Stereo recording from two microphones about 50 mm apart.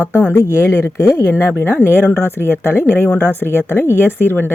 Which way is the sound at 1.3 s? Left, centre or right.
Left.